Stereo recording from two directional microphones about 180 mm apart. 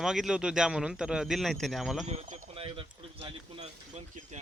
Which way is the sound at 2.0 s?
35° right (ahead or behind).